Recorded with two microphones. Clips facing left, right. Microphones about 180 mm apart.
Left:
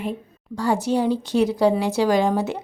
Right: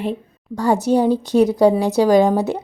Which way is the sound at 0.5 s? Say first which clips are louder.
Right 5 dB; 45° right (ahead or behind).